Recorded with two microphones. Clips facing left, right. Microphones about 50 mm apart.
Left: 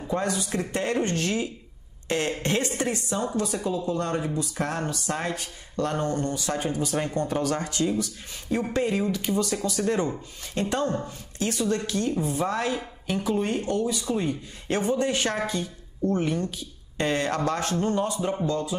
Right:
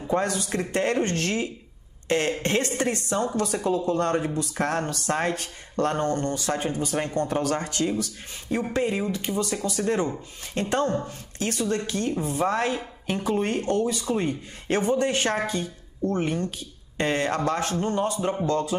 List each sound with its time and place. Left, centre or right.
0.2 s speech: right
8.7 s a man's voice: right
14.0 s a man's voice: right
18.5 s speech: right